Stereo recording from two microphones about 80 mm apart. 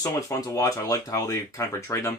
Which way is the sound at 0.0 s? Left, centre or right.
Left.